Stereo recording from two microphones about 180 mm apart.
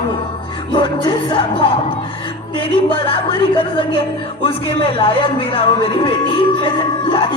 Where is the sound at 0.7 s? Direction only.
30° left (ahead or behind).